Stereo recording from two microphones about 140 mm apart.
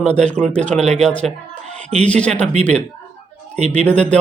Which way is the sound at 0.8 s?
55° right (ahead or behind).